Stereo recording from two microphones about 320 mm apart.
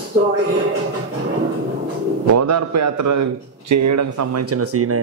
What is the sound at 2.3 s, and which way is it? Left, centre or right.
A man's voice, right.